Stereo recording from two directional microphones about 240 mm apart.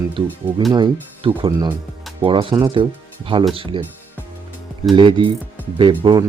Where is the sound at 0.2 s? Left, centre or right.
Right.